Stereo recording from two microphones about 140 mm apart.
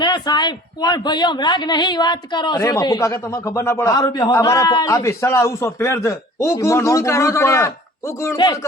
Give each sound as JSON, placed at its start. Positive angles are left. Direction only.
{"t": 0.0, "sound": "a man's voice", "side_deg": 30}
{"t": 3.9, "sound": "a man's voice", "side_deg": 30}